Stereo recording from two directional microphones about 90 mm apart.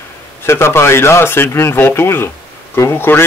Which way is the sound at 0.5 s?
30° left (ahead or behind).